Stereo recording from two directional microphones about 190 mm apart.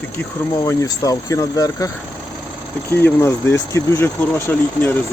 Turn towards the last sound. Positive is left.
turn(degrees=15)  # may be behind; listen again after turning